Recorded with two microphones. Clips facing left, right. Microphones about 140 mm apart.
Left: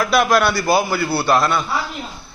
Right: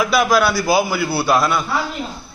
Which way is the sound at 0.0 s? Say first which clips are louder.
Even; 5° right (ahead or behind).